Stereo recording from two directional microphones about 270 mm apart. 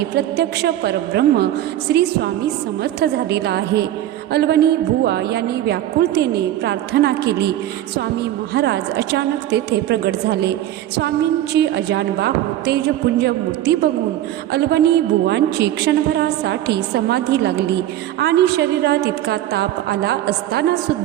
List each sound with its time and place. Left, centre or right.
0.2 s a woman's voice: right